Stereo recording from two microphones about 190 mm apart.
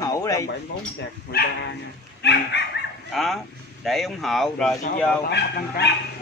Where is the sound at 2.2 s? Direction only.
60° left (ahead or behind).